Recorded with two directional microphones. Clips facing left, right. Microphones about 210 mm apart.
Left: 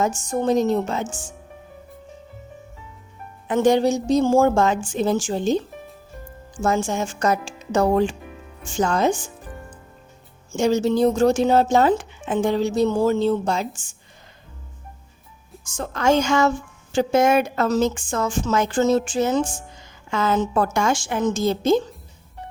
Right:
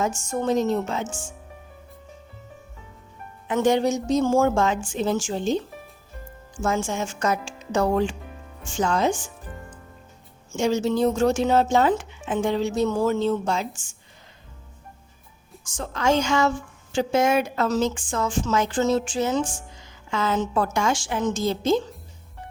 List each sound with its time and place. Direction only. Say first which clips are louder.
0.3 s speech: left 3 dB; 35° left (ahead or behind)
3.4 s speech: left 3 dB; 40° left (ahead or behind)
6.6 s speech: left 3 dB; 40° left (ahead or behind)
10.5 s speech: left 3 dB; 40° left (ahead or behind)
15.8 s speech: left 3 dB; 50° left (ahead or behind)